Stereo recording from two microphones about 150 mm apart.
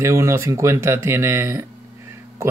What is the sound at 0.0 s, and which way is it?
Speech, 20° right (ahead or behind).